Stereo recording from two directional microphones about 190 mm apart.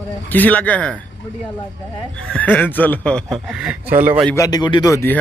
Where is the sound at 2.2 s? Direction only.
5° left (ahead or behind).